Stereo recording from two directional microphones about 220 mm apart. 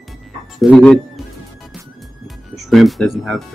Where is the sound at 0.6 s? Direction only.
5° left (ahead or behind).